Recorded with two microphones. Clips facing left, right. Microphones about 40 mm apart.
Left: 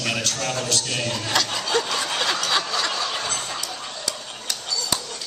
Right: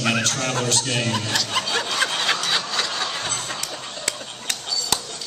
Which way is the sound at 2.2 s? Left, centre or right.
Right.